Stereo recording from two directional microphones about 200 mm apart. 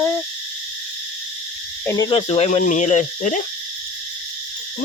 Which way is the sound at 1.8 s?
20° left (ahead or behind).